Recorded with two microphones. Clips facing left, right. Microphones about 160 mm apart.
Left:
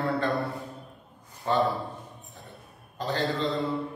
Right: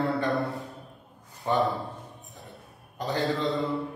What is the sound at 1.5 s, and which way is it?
Speech, 15° right (ahead or behind).